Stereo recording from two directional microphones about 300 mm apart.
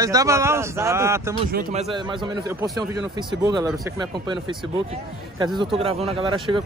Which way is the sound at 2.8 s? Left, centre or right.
Centre.